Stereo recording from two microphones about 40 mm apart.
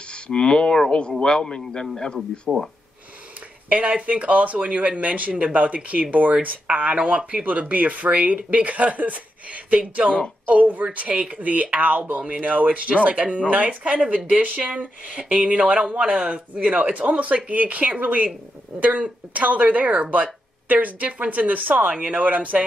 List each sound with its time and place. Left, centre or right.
0.1 s a man's voice: left
2.5 s speech: centre
3.6 s speech: right
7.4 s speech: right
11.1 s speech: right
16.3 s speech: right
17.5 s speech: right
21.8 s speech: right
22.2 s speech: right